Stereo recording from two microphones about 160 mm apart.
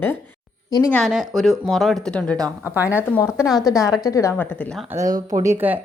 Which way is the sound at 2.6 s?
10° right (ahead or behind).